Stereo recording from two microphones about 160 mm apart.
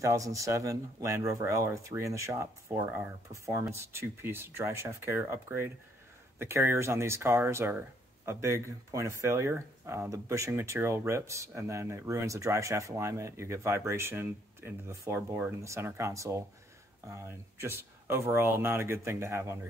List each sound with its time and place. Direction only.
0.0 s speech: 20° right (ahead or behind)